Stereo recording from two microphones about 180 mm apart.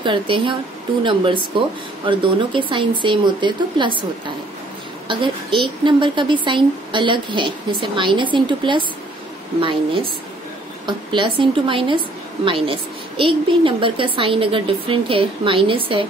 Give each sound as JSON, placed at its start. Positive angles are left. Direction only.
{"t": 0.0, "sound": "a woman's voice", "side_deg": -25}
{"t": 5.0, "sound": "a woman's voice", "side_deg": -25}
{"t": 10.9, "sound": "a woman's voice", "side_deg": -25}